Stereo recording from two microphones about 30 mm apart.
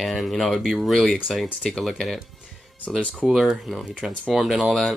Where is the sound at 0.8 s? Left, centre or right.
Centre.